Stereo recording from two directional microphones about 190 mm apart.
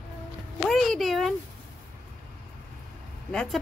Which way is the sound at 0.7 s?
Centre (ahead or behind).